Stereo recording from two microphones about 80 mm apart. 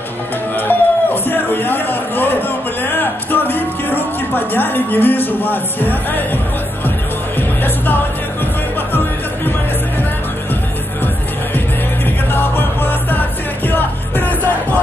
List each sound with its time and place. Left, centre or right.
0.6 s a sound: left
7.3 s music: left
12.3 s music: left